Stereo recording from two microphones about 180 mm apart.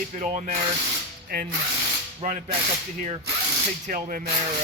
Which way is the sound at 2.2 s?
45° right (ahead or behind).